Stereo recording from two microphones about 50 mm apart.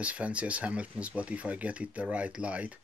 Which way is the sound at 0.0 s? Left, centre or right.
Right.